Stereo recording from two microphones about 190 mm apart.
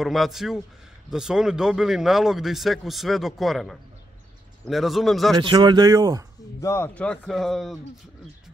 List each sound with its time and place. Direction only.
0.0 s speech: centre (ahead or behind)
5.4 s speech: 25° right (ahead or behind)
6.6 s speech: 15° left (ahead or behind)